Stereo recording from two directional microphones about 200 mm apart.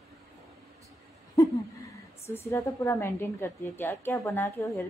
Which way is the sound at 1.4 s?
15° left (ahead or behind).